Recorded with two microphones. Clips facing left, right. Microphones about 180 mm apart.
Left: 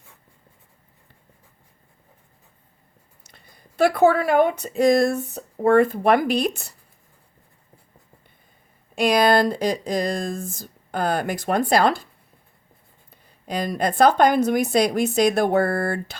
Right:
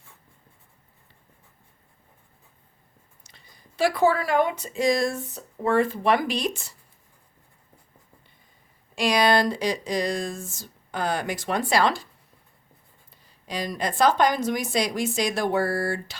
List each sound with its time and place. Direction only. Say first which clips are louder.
3.3 s speech: left 6 dB; 60° left (ahead or behind)
9.0 s speech: left 3 dB; 50° left (ahead or behind)
13.4 s speech: left 5 dB; 55° left (ahead or behind)